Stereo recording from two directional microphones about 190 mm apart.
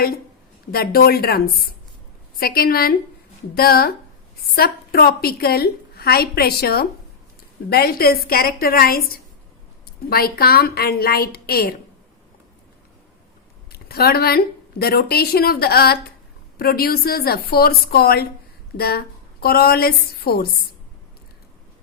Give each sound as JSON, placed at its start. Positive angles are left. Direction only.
{"t": 0.7, "sound": "a woman's voice", "side_deg": 50}
{"t": 2.4, "sound": "a woman's voice", "side_deg": 50}
{"t": 13.7, "sound": "a woman's voice", "side_deg": 55}